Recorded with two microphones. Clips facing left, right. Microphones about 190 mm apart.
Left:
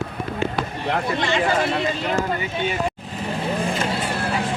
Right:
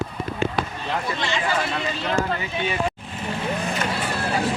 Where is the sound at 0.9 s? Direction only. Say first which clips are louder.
Left 8 dB; 50° left (ahead or behind).